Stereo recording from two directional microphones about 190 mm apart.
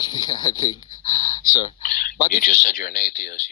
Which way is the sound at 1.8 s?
45° left (ahead or behind).